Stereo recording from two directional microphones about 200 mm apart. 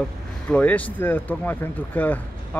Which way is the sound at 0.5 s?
5° left (ahead or behind).